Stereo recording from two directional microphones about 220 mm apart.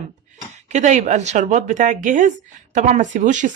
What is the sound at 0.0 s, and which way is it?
Speech, 30° right (ahead or behind).